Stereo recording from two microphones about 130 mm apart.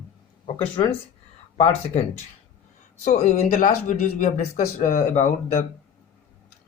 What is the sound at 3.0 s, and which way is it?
Speech, 65° left (ahead or behind).